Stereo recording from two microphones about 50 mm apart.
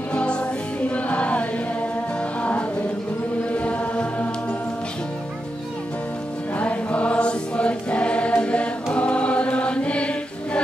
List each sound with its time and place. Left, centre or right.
0.1 s music: left
3.5 s mantra: left
6.6 s choir: left